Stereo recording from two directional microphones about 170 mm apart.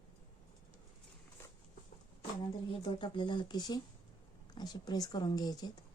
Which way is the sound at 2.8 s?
30° left (ahead or behind).